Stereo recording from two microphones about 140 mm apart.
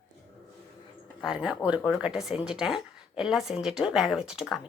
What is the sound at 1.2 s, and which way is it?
Speech, 5° right (ahead or behind).